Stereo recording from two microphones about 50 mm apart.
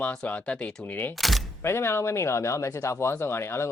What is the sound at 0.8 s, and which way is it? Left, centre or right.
Speech, left.